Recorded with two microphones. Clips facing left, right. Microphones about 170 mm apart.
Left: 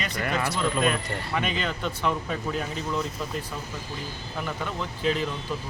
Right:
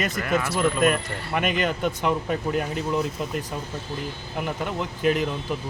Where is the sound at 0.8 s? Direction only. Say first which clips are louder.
Right 3 dB; 50° right (ahead or behind).